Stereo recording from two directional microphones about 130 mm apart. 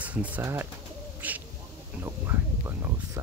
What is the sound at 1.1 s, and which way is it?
Owl, 15° right (ahead or behind).